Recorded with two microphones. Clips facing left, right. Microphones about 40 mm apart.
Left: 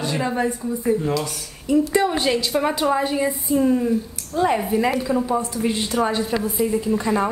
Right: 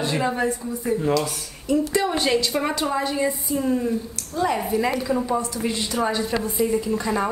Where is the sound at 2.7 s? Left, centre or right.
Centre.